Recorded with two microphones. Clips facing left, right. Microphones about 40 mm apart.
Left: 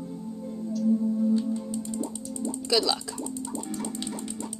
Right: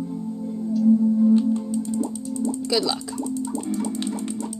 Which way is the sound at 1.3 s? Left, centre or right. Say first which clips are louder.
Right 7 dB; right.